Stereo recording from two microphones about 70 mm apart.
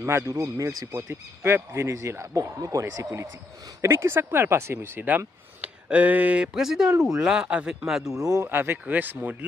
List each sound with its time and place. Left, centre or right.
0.0 s speech: right
0.4 s speech: right
3.8 s speech: right; by 6.5 s centre
6.5 s speech: centre
8.2 s speech: right
8.5 s speech: right